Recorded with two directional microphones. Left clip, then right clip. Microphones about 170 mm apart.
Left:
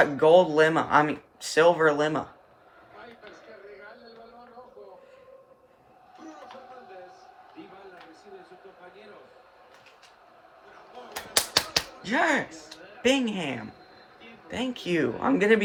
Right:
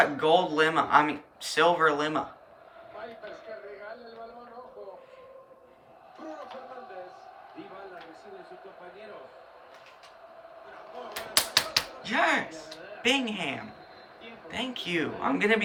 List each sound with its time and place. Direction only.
0.0 s speech: 35° left (ahead or behind)
11.1 s typewriter: 40° left (ahead or behind)
14.4 s speech: 35° left (ahead or behind)